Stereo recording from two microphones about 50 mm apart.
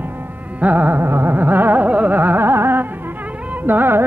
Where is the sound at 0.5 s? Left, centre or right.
Right.